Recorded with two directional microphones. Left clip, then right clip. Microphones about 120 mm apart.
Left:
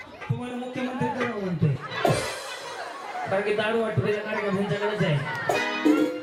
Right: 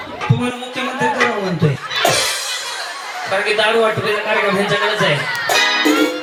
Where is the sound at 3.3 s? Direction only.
25° right (ahead or behind).